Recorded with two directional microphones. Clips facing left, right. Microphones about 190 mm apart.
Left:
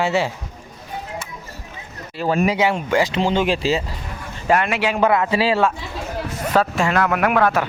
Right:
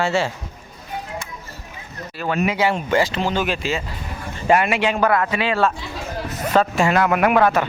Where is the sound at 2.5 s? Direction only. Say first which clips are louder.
Even; 20° left (ahead or behind).